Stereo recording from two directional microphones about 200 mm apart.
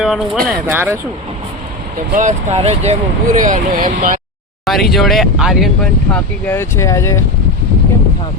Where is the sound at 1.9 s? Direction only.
40° right (ahead or behind).